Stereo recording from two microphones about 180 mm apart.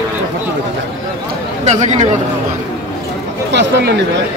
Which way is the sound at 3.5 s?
70° right (ahead or behind).